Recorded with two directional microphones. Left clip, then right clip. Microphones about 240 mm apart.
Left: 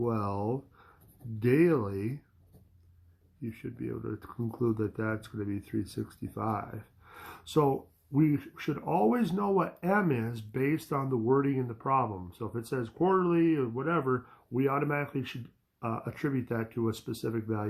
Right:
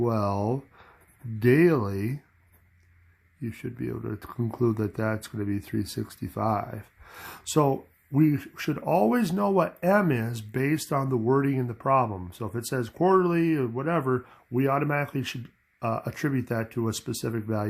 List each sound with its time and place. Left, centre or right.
0.0 s speech: right
3.4 s speech: right